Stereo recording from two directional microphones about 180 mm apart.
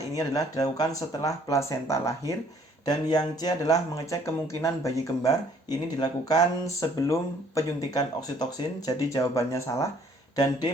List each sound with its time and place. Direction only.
0.1 s speech: 20° left (ahead or behind)